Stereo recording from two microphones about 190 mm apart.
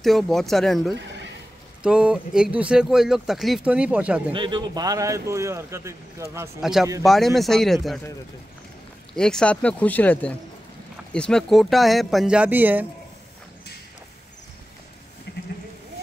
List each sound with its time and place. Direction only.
0.0 s speech: centre (ahead or behind)
4.3 s speech: 25° right (ahead or behind)
6.6 s speech: centre (ahead or behind)
9.1 s speech: 5° left (ahead or behind)
15.3 s sheep: 60° left (ahead or behind)